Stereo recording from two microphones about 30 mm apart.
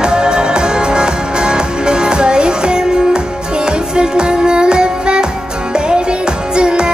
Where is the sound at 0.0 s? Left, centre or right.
Right.